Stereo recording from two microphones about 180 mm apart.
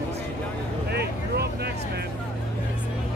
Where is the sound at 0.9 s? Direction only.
65° right (ahead or behind).